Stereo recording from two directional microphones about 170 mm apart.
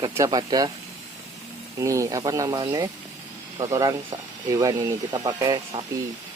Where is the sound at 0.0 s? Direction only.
20° right (ahead or behind).